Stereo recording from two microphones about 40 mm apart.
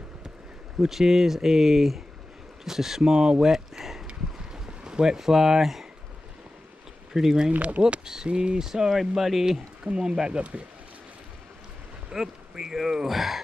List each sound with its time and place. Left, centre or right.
0.7 s speech: centre
4.1 s a sound: right
7.2 s speech: centre
7.5 s speech: right
8.0 s speech: centre
8.5 s speech: centre
9.9 s speech: centre
12.1 s speech: centre